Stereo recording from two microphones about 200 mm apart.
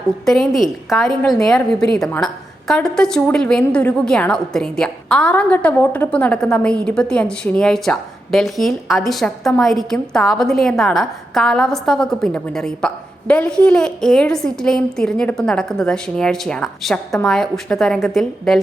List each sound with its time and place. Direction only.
0.3 s a woman's voice: centre (ahead or behind)